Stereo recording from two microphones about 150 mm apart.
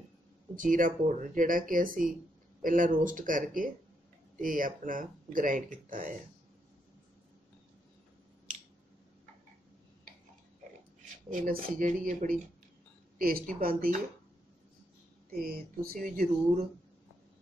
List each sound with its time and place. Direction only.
0.6 s speech: 65° right (ahead or behind)
11.2 s speech: 65° right (ahead or behind)
15.3 s speech: 75° right (ahead or behind)